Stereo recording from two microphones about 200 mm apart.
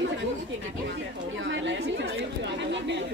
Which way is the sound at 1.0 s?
65° right (ahead or behind).